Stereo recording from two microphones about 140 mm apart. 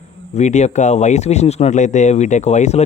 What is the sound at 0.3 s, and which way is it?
Speech, 55° left (ahead or behind).